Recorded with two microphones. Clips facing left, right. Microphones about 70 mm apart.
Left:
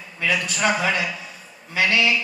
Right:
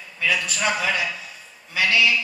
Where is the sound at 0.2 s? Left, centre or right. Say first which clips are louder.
Left 1 dB; left.